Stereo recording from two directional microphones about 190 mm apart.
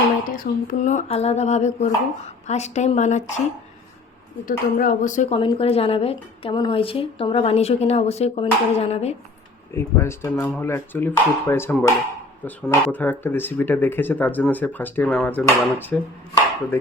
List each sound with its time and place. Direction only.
0.3 s speech: 45° left (ahead or behind)
4.4 s speech: 45° left (ahead or behind)
5.4 s speech: 30° left (ahead or behind)
9.7 s speech: 15° left (ahead or behind)